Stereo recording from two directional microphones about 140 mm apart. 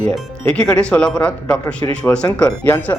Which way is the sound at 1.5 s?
25° left (ahead or behind).